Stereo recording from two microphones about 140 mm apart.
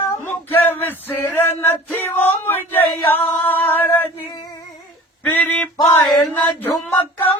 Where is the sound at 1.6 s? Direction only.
15° left (ahead or behind).